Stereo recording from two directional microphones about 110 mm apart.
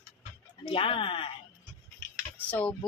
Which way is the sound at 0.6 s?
55° left (ahead or behind).